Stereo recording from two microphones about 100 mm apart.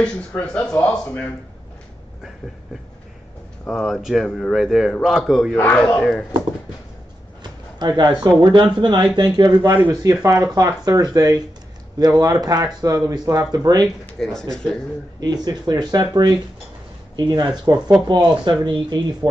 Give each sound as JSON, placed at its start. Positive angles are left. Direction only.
{"t": 0.4, "sound": "speech", "side_deg": 10}
{"t": 3.6, "sound": "speech", "side_deg": 5}
{"t": 5.6, "sound": "speech", "side_deg": 10}
{"t": 7.8, "sound": "speech", "side_deg": -45}
{"t": 14.2, "sound": "speech", "side_deg": 5}
{"t": 15.1, "sound": "speech", "side_deg": -45}